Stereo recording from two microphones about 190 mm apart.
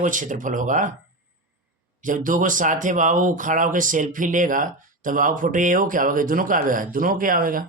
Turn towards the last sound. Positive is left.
turn(degrees=-45)  # may be behind; listen again after turning